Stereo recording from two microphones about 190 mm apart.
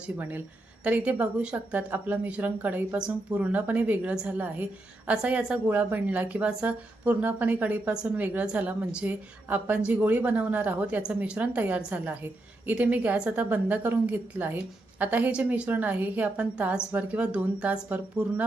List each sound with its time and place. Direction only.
0.2 s speech: 10° right (ahead or behind)